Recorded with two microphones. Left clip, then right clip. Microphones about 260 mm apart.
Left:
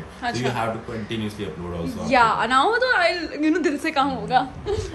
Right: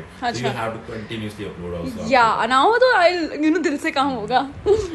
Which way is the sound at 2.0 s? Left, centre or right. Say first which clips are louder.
Right 2 dB; centre.